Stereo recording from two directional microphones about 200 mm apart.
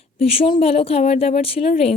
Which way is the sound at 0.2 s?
30° left (ahead or behind).